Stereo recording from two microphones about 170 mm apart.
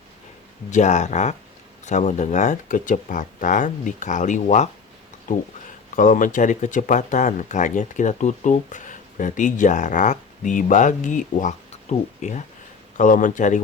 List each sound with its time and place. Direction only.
0.7 s speech: 45° left (ahead or behind)
6.0 s speech: 50° left (ahead or behind)